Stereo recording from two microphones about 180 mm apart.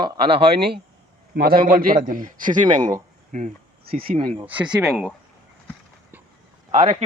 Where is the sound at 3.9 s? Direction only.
50° right (ahead or behind).